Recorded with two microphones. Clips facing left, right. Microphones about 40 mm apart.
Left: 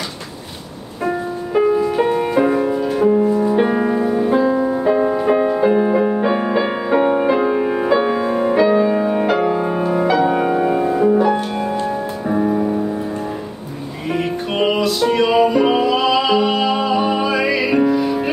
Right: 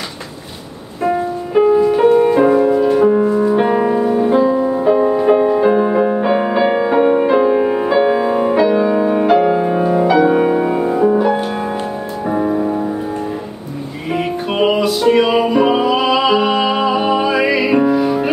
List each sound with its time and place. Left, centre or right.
1.0 s music: centre
14.1 s music: centre